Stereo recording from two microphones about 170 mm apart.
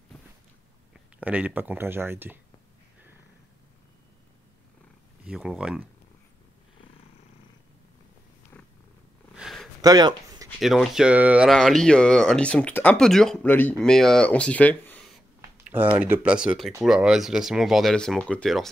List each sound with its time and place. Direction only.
1.2 s speech: 10° right (ahead or behind)
5.2 s speech: 5° right (ahead or behind)
8.5 s purr: 5° left (ahead or behind)
9.4 s a sound: centre (ahead or behind)
9.8 s speech: 25° right (ahead or behind)
10.6 s speech: centre (ahead or behind)
15.5 s speech: 10° right (ahead or behind)